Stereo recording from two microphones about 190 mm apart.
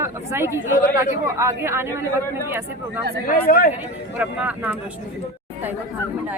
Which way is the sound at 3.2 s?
50° left (ahead or behind).